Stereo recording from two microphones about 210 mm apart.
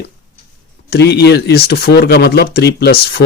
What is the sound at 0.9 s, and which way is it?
Speech, 50° left (ahead or behind).